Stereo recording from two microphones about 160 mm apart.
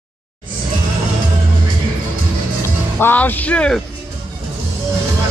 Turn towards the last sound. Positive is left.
turn(degrees=5)  # may be behind; listen again after turning